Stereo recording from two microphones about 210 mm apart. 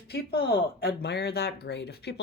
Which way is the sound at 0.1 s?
45° left (ahead or behind).